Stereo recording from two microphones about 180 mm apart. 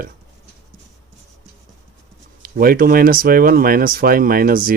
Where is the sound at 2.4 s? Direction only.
55° right (ahead or behind).